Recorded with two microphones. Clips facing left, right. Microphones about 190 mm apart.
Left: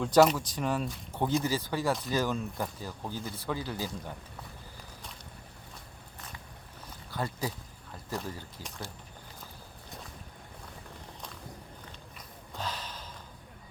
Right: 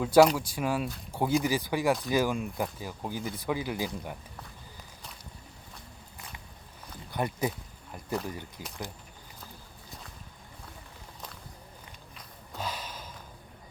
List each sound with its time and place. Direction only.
0.0 s speech: centre (ahead or behind)
7.1 s speech: 20° right (ahead or behind)
12.5 s a sound: 10° right (ahead or behind)